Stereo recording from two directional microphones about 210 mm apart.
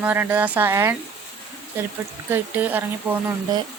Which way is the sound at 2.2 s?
10° right (ahead or behind).